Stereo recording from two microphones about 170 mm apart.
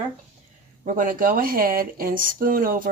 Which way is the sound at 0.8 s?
50° right (ahead or behind).